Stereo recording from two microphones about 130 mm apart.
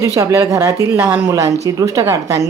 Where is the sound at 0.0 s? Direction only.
20° right (ahead or behind).